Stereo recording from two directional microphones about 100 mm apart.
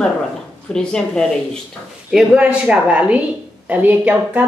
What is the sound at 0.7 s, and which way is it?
Speech, 5° left (ahead or behind).